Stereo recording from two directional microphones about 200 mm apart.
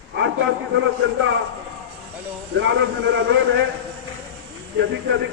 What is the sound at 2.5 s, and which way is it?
A man's voice, 65° right (ahead or behind).